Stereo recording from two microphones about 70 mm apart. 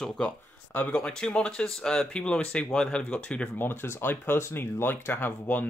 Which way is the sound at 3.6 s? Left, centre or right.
Left.